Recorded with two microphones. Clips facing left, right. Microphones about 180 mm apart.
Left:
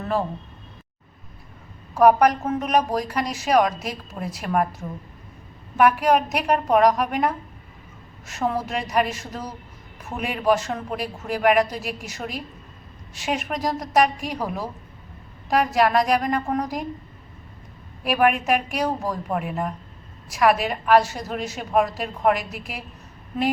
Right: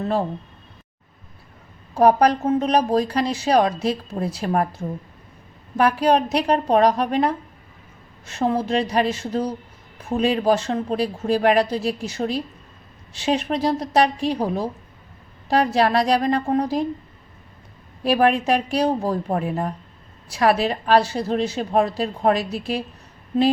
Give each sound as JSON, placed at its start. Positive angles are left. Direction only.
{"t": 2.0, "sound": "a woman's voice", "side_deg": -30}
{"t": 18.0, "sound": "a woman's voice", "side_deg": -30}